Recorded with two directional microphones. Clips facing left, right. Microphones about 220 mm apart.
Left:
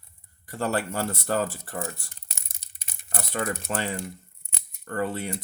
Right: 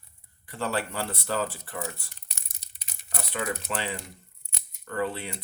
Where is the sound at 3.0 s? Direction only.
45° left (ahead or behind).